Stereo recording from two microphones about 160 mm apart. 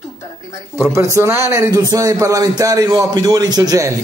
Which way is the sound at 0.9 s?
20° right (ahead or behind).